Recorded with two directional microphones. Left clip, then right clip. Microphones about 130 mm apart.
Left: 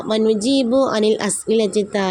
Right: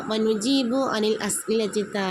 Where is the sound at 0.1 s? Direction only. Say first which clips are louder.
Left 6 dB; 25° left (ahead or behind).